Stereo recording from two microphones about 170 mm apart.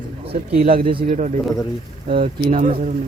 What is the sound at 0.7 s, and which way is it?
Speech, 30° right (ahead or behind).